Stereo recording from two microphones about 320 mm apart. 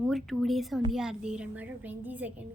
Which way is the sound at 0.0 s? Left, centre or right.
Centre.